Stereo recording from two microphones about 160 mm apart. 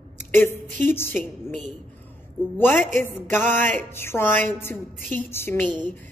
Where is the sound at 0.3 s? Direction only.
15° left (ahead or behind).